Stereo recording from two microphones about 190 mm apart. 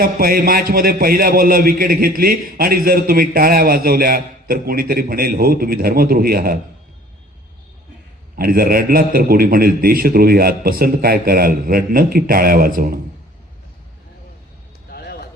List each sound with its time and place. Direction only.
0.0 s a man's voice: 50° right (ahead or behind)
8.4 s a man's voice: 50° right (ahead or behind)
14.8 s a sound: 55° left (ahead or behind)